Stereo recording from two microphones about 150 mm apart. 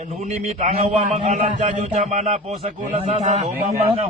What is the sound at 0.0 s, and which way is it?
A man's voice, 50° right (ahead or behind).